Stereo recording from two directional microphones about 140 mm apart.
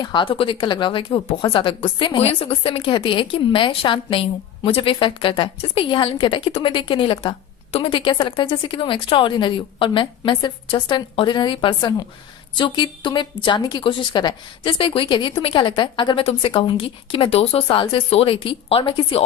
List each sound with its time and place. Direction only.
0.0 s speech: 35° left (ahead or behind)